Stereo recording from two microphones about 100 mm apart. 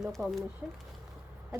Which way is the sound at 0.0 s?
Centre (ahead or behind).